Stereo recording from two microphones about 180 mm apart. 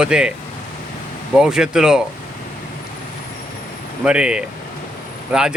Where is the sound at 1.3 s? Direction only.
5° right (ahead or behind).